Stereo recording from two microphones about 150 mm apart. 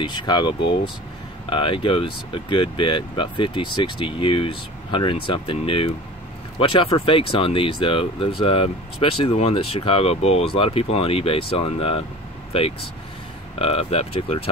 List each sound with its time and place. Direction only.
0.0 s speech: 30° left (ahead or behind)
13.6 s speech: 40° left (ahead or behind)